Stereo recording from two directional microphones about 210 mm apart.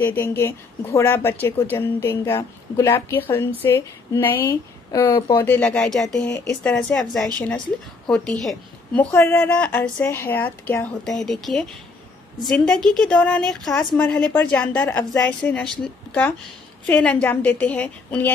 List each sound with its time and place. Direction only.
0.0 s a woman's voice: 10° left (ahead or behind)